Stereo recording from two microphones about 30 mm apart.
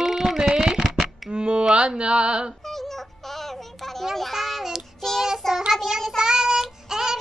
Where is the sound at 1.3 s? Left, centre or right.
Right.